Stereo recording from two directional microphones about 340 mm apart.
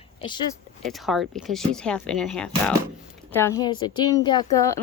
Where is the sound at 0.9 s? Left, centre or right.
Centre.